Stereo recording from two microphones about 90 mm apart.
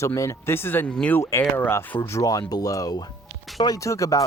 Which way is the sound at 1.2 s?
30° left (ahead or behind).